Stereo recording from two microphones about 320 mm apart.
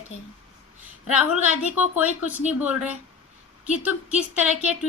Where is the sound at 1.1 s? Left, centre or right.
Centre.